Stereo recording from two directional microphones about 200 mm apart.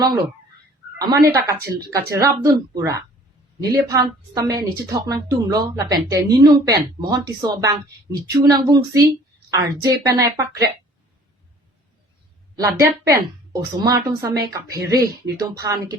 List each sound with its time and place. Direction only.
0.9 s a woman's voice: 20° right (ahead or behind)
12.5 s a woman's voice: 15° right (ahead or behind)